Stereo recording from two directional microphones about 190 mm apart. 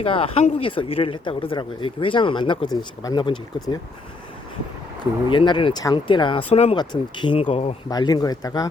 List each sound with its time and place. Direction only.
0.0 s speech: 30° left (ahead or behind)
5.3 s speech: 25° left (ahead or behind)
7.9 s speech: 20° left (ahead or behind)